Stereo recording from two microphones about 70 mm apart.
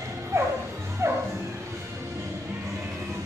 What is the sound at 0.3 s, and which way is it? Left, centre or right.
Music, right.